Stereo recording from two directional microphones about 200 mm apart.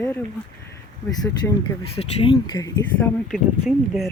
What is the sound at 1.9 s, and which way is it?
Speech, 25° left (ahead or behind).